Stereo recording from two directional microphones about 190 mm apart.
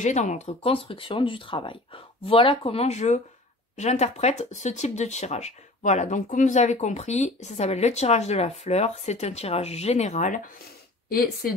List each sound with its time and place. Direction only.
0.0 s a woman's voice: 40° left (ahead or behind)